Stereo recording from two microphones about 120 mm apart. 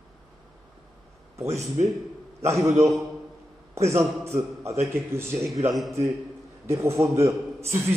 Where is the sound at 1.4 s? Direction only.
70° right (ahead or behind).